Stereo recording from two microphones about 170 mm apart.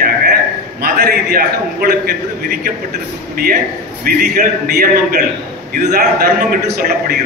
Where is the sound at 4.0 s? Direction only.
60° right (ahead or behind).